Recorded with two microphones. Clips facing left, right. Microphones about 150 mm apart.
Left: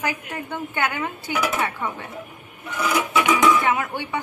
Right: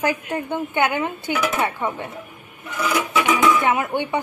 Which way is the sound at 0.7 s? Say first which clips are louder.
Right 4 dB; 25° right (ahead or behind).